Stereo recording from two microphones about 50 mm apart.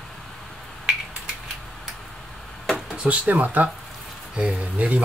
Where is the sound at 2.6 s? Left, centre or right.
Centre.